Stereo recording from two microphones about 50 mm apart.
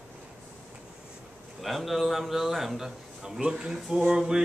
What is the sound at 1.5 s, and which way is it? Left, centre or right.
A man's voice, centre.